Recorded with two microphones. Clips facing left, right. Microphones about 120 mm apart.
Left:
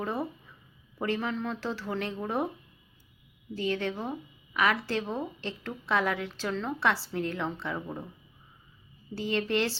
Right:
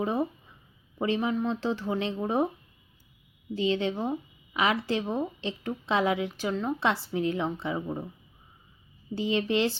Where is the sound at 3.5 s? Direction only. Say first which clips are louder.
Right 4 dB; 20° right (ahead or behind).